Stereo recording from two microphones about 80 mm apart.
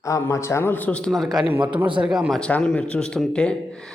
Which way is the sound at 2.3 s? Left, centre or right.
Centre.